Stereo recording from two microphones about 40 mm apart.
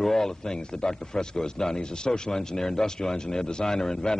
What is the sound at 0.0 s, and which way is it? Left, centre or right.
A man's voice, centre.